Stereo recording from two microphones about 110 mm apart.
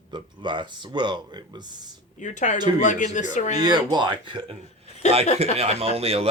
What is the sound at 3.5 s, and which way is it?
Speech, 40° right (ahead or behind).